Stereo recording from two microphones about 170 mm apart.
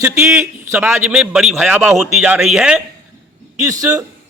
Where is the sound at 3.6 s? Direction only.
20° right (ahead or behind).